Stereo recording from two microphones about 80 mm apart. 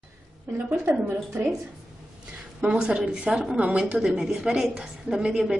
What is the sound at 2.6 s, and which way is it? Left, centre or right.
A woman's voice, centre.